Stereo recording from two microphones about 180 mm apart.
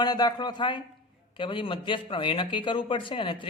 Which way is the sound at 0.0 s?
20° left (ahead or behind).